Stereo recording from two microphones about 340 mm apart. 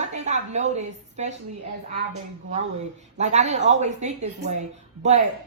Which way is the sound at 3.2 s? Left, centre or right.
Centre.